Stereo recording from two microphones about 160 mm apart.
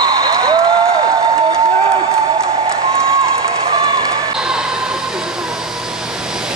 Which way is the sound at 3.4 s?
25° right (ahead or behind).